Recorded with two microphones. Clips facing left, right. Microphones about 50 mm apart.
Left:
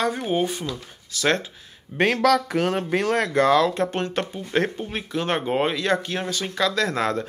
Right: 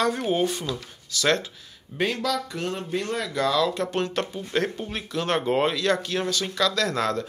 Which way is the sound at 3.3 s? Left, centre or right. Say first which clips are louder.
Left 4 dB; left.